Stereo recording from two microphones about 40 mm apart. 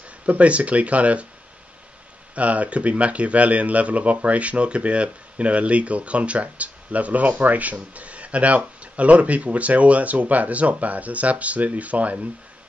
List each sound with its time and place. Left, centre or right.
0.3 s speech: right
2.3 s speech: right